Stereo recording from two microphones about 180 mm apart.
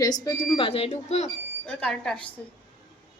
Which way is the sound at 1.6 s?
5° left (ahead or behind).